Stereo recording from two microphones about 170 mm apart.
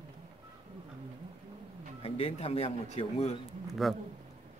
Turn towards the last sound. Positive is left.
turn(degrees=0)  # may be behind; listen again after turning